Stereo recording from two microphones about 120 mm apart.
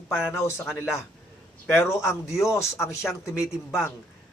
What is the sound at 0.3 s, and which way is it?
Speech, 25° left (ahead or behind).